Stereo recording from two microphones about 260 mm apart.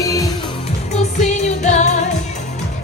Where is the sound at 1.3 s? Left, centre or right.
Left.